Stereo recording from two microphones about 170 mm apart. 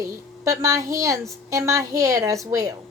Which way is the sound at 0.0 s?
20° right (ahead or behind).